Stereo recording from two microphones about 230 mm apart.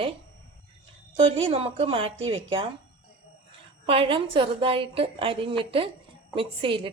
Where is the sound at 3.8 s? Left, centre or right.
Right.